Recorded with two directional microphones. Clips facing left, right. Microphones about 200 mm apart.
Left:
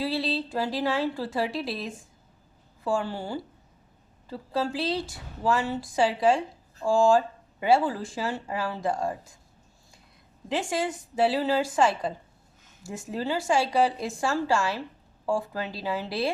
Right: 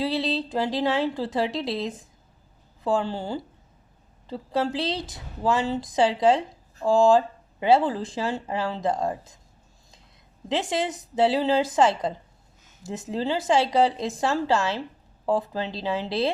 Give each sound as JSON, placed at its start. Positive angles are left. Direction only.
{"t": 0.0, "sound": "speech", "side_deg": -20}
{"t": 10.5, "sound": "speech", "side_deg": -20}